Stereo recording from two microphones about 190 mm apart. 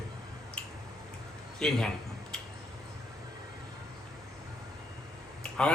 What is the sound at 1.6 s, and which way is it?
Speech, 5° left (ahead or behind).